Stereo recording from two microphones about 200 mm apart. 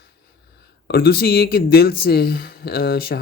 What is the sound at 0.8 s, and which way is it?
Speech, 50° left (ahead or behind).